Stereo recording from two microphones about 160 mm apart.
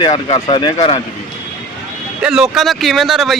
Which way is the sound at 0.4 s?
30° left (ahead or behind).